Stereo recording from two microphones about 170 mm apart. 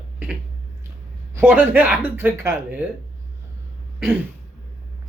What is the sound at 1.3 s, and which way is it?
Speech, 10° right (ahead or behind).